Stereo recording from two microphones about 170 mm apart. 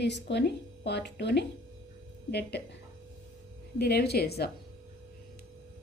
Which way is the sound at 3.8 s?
75° left (ahead or behind).